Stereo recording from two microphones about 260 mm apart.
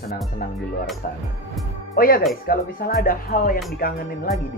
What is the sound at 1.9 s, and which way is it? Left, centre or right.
Speech, left.